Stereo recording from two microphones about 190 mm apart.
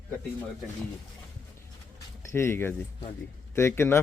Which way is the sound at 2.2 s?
10° left (ahead or behind).